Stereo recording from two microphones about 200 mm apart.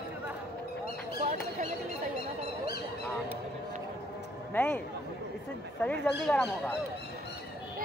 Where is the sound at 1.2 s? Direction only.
35° right (ahead or behind).